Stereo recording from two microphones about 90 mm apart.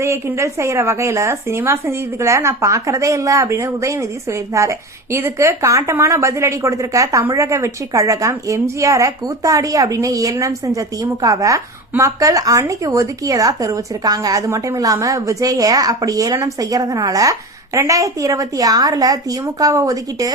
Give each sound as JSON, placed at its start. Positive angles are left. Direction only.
{"t": 0.0, "sound": "speech", "side_deg": -30}